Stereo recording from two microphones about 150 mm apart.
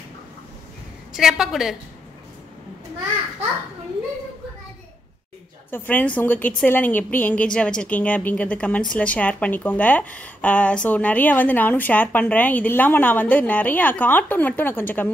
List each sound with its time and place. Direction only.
1.1 s a woman's voice: 5° right (ahead or behind)
5.7 s a woman's voice: 10° left (ahead or behind)